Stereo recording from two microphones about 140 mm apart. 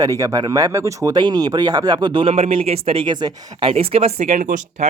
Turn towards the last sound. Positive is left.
turn(degrees=-65)  # may be behind; listen again after turning